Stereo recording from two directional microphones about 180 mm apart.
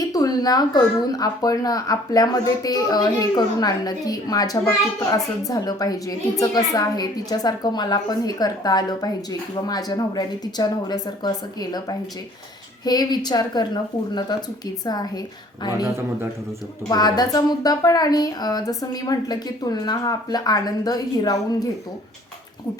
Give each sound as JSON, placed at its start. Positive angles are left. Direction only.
{"t": 0.0, "sound": "speech", "side_deg": 20}
{"t": 16.9, "sound": "speech", "side_deg": 20}